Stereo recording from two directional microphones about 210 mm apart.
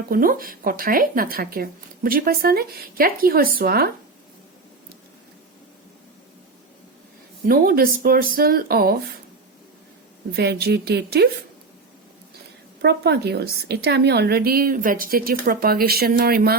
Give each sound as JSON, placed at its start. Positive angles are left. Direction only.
{"t": 0.1, "sound": "speech", "side_deg": -40}
{"t": 7.4, "sound": "speech", "side_deg": -40}
{"t": 10.3, "sound": "speech", "side_deg": -50}
{"t": 12.8, "sound": "speech", "side_deg": -55}